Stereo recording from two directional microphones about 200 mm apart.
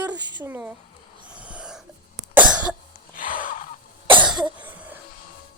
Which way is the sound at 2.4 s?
5° right (ahead or behind).